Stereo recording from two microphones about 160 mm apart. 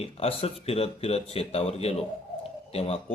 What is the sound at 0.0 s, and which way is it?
A man's voice, 40° left (ahead or behind).